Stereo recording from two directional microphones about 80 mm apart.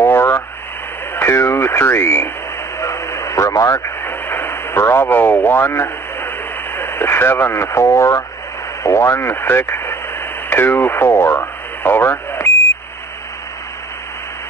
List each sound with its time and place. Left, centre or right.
0.0 s radio: left
1.1 s speech: left
2.8 s radio: left
8.8 s speech: left